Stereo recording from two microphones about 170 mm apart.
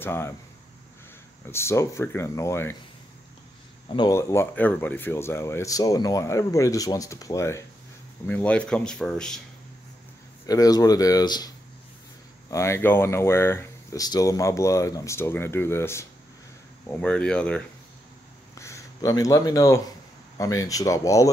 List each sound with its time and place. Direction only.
0.0 s speech: 15° left (ahead or behind)
1.4 s speech: 15° left (ahead or behind)
3.9 s speech: 20° left (ahead or behind); by 9.4 s 5° left (ahead or behind)
10.4 s speech: 20° left (ahead or behind); by 17.6 s 5° left (ahead or behind)
18.5 s a sound: 15° left (ahead or behind)
20.3 s speech: 20° left (ahead or behind)